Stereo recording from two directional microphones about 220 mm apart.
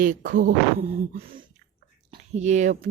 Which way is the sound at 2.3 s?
30° right (ahead or behind).